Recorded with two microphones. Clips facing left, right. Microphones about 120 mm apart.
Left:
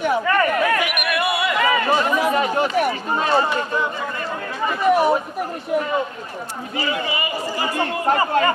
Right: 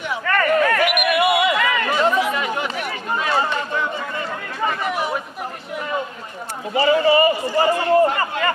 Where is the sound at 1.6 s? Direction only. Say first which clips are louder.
Left 2 dB; 35° left (ahead or behind).